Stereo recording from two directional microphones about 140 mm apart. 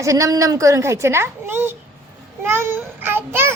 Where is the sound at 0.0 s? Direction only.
25° right (ahead or behind).